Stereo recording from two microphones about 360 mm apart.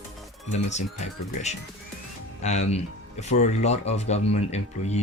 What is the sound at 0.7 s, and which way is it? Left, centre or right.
Speech, centre.